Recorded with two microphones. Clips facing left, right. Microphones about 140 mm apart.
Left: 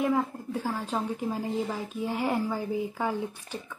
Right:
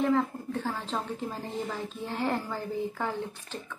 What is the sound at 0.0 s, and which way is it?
Speech, 10° left (ahead or behind).